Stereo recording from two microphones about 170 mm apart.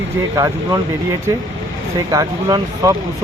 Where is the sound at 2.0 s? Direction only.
20° right (ahead or behind).